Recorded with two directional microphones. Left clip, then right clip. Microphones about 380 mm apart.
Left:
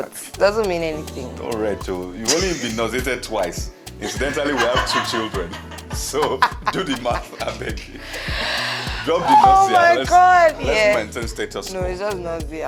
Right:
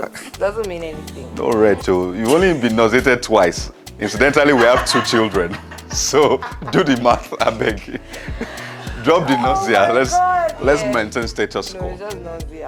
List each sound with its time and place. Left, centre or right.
0.3 s speech: left
1.4 s speech: right
9.0 s speech: right
10.1 s speech: left
10.9 s speech: right